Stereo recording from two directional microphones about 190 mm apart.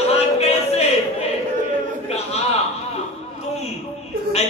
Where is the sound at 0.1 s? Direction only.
35° left (ahead or behind).